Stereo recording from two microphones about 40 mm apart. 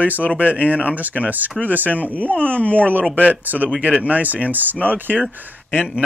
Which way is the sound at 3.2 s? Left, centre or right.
Right.